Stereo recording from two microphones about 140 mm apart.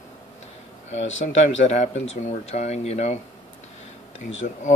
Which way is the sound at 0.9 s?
55° left (ahead or behind).